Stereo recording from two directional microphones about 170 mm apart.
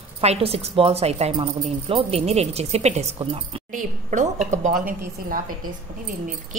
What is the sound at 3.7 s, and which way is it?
A woman's voice, 45° right (ahead or behind).